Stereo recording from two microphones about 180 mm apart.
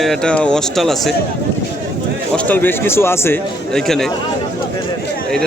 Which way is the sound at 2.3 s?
10° left (ahead or behind).